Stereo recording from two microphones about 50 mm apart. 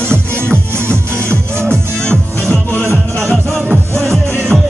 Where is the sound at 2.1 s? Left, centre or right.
Right.